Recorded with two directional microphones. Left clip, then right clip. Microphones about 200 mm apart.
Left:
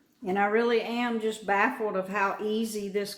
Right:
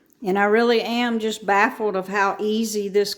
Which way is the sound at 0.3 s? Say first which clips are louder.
Right 7 dB; 60° right (ahead or behind).